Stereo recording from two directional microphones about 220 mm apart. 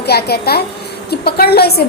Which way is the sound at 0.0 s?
45° left (ahead or behind).